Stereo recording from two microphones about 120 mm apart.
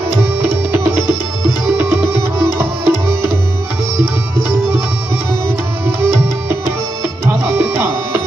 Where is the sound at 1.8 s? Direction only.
20° right (ahead or behind).